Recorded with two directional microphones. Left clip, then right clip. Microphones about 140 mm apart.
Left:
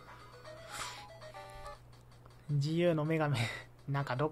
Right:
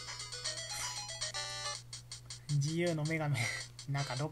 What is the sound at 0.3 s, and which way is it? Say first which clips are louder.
Music: right 6 dB; 15° right (ahead or behind).